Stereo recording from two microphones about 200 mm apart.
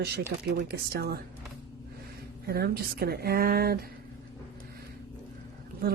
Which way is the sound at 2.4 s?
50° right (ahead or behind).